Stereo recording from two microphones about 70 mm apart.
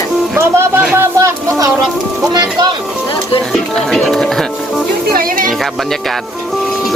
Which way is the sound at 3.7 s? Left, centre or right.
Centre.